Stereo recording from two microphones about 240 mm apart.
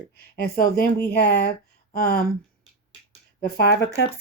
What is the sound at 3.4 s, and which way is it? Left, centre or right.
Speech, left.